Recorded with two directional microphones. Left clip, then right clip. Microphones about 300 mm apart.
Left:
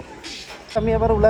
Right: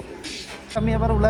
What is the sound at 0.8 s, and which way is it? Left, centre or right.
Speech, left.